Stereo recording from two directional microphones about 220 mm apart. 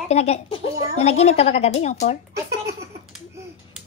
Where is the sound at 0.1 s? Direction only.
30° left (ahead or behind).